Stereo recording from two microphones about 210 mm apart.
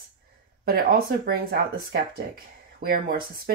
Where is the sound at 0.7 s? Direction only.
45° right (ahead or behind).